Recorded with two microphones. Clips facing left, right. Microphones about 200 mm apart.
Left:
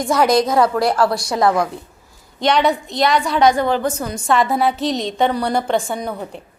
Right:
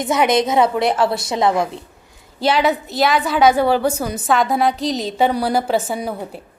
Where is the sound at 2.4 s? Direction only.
5° right (ahead or behind).